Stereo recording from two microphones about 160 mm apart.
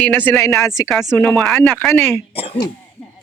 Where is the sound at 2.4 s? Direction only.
25° left (ahead or behind).